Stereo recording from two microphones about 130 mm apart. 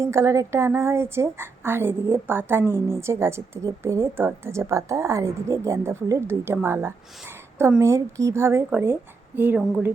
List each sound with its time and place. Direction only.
0.0 s a woman's voice: 20° right (ahead or behind)